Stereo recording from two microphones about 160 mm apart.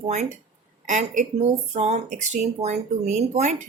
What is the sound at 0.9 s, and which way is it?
Speech, 50° right (ahead or behind).